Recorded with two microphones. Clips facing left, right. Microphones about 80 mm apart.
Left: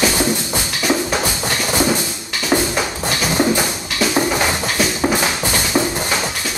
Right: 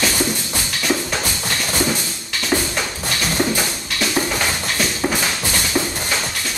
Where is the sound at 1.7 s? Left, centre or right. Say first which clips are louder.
Left 4 dB; centre.